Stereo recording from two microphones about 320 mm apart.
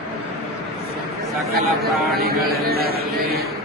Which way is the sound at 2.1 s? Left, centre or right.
Right.